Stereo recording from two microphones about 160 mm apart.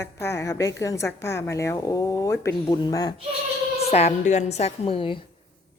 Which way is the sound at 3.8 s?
40° left (ahead or behind).